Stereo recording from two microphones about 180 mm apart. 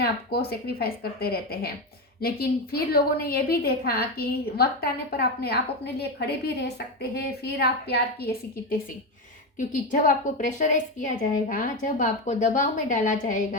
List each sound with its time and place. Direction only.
0.0 s a woman's voice: 60° left (ahead or behind)
9.6 s a woman's voice: 45° left (ahead or behind)